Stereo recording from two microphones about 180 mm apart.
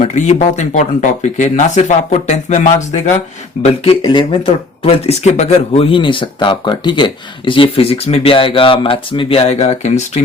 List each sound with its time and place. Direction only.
0.0 s speech: 40° left (ahead or behind)